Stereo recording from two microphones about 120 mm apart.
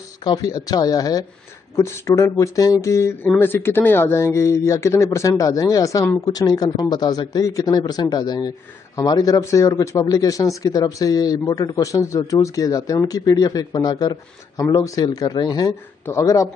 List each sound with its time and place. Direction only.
0.2 s a man's voice: 35° left (ahead or behind)